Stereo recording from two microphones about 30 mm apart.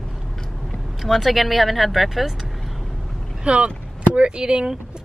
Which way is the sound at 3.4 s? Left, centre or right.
Right.